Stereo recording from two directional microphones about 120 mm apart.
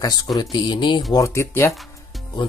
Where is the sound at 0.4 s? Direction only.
40° left (ahead or behind).